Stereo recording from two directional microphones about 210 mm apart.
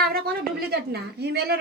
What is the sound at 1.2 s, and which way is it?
Speech, 50° right (ahead or behind).